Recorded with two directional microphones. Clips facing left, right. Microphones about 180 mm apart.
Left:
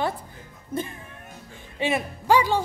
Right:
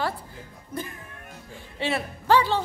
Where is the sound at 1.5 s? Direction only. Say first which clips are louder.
Left 2 dB; 15° left (ahead or behind).